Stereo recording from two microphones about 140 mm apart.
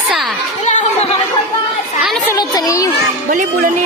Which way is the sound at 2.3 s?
25° left (ahead or behind).